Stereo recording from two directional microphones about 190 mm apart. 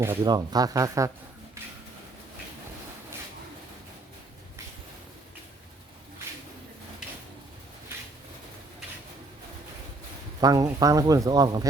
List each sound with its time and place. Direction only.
0.0 s speech: 15° right (ahead or behind)
10.4 s speech: 20° right (ahead or behind)